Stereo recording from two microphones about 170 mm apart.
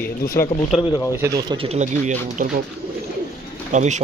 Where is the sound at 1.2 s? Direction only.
20° right (ahead or behind).